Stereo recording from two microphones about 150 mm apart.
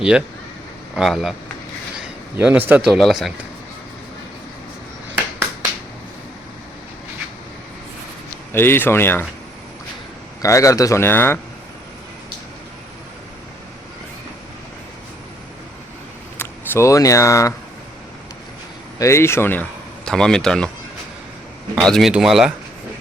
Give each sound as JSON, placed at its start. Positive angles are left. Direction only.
{"t": 0.9, "sound": "speech", "side_deg": 0}
{"t": 2.3, "sound": "a man's voice", "side_deg": -10}
{"t": 8.5, "sound": "speech", "side_deg": 15}
{"t": 10.4, "sound": "speech", "side_deg": 20}
{"t": 16.4, "sound": "speech", "side_deg": 20}
{"t": 18.9, "sound": "speech", "side_deg": 20}
{"t": 21.8, "sound": "speech", "side_deg": 5}